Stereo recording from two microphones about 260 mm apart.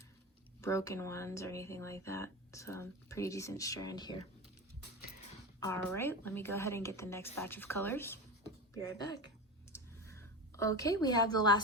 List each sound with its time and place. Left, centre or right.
0.6 s speech: centre
5.5 s speech: centre
9.7 s a sound: centre